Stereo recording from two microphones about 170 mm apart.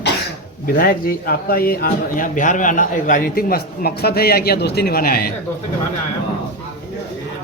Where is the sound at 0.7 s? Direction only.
60° left (ahead or behind).